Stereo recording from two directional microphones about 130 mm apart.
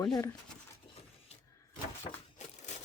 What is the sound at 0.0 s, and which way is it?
Speech, 30° left (ahead or behind).